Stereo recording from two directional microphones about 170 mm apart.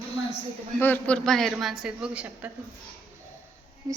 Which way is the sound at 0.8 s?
10° left (ahead or behind).